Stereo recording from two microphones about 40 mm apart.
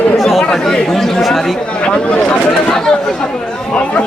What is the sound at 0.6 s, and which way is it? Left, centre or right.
Speech, centre.